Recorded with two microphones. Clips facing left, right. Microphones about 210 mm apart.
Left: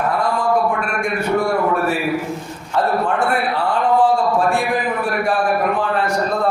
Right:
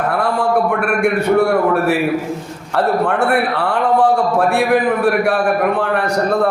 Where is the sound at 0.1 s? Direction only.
65° right (ahead or behind).